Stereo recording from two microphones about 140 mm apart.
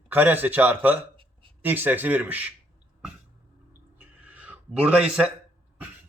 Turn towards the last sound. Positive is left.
turn(degrees=-10)  # may be behind; listen again after turning